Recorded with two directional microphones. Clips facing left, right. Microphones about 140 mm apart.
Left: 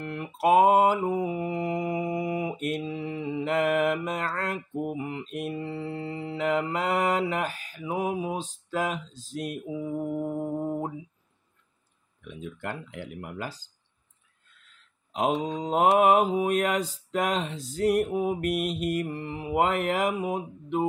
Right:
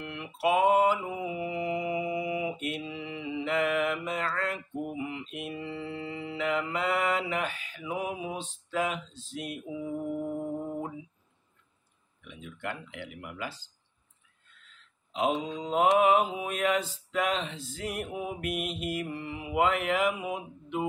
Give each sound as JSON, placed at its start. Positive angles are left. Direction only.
{"t": 0.0, "sound": "mantra", "side_deg": 40}
{"t": 12.3, "sound": "mantra", "side_deg": 40}
{"t": 15.1, "sound": "mantra", "side_deg": 45}